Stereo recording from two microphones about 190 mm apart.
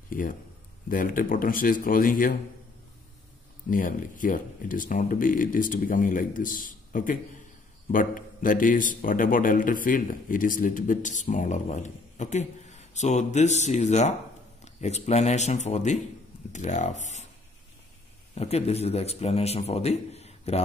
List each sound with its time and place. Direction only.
0.1 s a man's voice: 50° left (ahead or behind)
3.7 s a man's voice: 45° left (ahead or behind)
18.3 s a man's voice: 35° left (ahead or behind)